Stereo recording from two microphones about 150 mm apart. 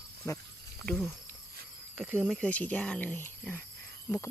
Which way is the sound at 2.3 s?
5° left (ahead or behind).